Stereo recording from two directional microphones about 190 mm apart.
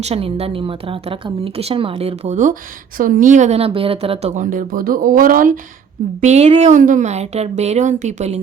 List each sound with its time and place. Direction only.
0.0 s a woman's voice: 30° right (ahead or behind)